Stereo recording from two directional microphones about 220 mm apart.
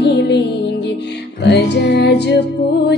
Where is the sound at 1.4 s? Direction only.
50° left (ahead or behind).